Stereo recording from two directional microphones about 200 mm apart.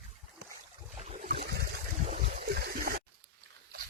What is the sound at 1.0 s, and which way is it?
Boat, 35° right (ahead or behind).